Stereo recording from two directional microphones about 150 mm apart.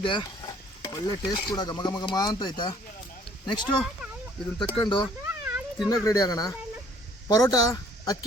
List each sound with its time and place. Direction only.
0.0 s speech: 35° left (ahead or behind)
4.7 s speech: 35° left (ahead or behind)
5.2 s a sound: 10° right (ahead or behind)
5.9 s speech: 25° left (ahead or behind)